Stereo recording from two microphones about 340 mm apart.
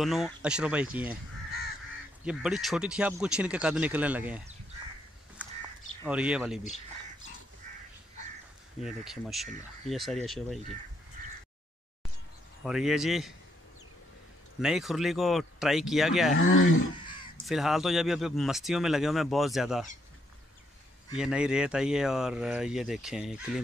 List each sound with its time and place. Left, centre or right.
0.0 s speech: centre
2.2 s speech: centre
6.0 s speech: centre
8.8 s speech: centre
12.6 s speech: centre
14.6 s speech: centre
16.3 s speech: left
17.0 s crow: centre
17.5 s speech: centre
21.2 s speech: centre